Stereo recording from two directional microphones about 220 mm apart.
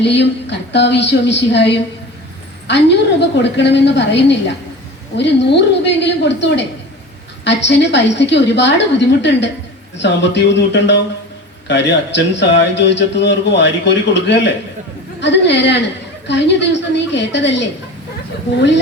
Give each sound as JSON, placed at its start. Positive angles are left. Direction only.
{"t": 0.0, "sound": "a man's voice", "side_deg": 50}